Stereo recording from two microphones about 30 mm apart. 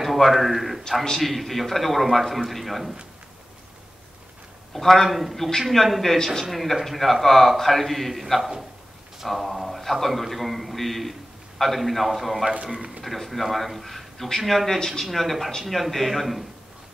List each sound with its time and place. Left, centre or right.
0.0 s a sound: centre
0.3 s a man's voice: centre
4.7 s a man's voice: centre
6.1 s speech: centre
6.5 s a man's voice: centre
8.4 s a man's voice: centre
9.2 s a man's voice: centre